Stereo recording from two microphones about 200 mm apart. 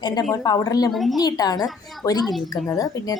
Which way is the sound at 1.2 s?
20° left (ahead or behind).